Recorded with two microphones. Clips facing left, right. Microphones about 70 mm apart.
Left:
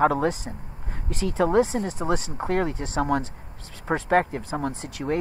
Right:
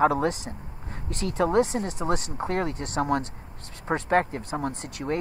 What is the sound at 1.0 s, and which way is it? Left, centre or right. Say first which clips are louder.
Speech: left 2 dB; right.